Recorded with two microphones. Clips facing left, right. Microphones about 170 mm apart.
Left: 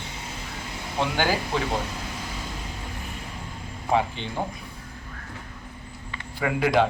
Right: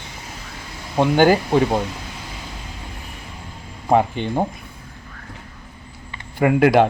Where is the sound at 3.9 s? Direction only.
50° right (ahead or behind).